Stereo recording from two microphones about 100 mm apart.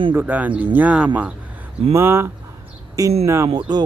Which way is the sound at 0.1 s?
15° right (ahead or behind).